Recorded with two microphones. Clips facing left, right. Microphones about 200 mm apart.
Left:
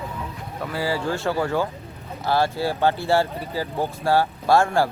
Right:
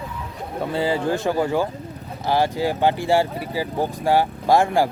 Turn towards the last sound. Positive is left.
turn(degrees=-15)  # may be behind; listen again after turning